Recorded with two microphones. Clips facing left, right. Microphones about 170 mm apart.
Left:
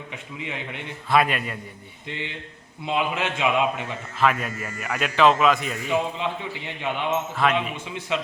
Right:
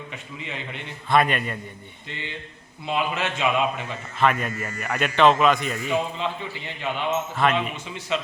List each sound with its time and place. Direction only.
0.1 s a man's voice: 15° left (ahead or behind)
1.1 s a man's voice: 5° left (ahead or behind)
2.0 s a man's voice: 15° left (ahead or behind)
4.2 s a man's voice: centre (ahead or behind)
5.9 s a man's voice: 15° left (ahead or behind)
7.4 s a man's voice: centre (ahead or behind)
8.1 s a man's voice: 15° left (ahead or behind)